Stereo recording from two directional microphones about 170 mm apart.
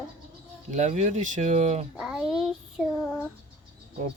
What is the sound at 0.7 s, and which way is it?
Speech, 45° right (ahead or behind).